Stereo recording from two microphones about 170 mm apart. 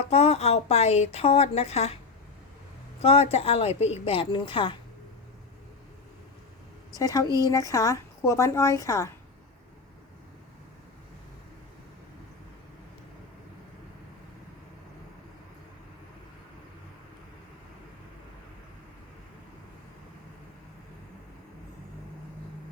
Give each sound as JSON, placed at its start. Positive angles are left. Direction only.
{"t": 0.0, "sound": "speech", "side_deg": 35}
{"t": 3.0, "sound": "speech", "side_deg": 35}
{"t": 7.0, "sound": "a woman's voice", "side_deg": 20}